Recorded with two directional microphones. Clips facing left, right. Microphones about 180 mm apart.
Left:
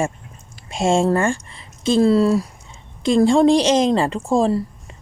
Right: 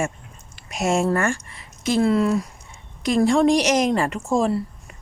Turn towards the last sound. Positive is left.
turn(degrees=30)  # may be behind; listen again after turning